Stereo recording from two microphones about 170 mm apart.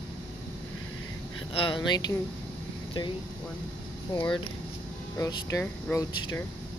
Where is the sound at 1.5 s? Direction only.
30° left (ahead or behind).